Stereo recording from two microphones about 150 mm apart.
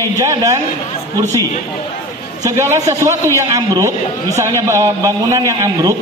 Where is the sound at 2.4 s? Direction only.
20° right (ahead or behind).